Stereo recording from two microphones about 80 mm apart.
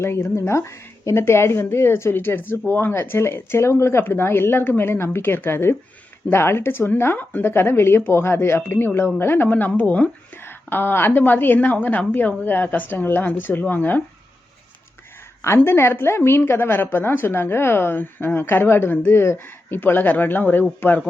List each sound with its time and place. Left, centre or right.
0.0 s a woman's voice: left
15.4 s a woman's voice: left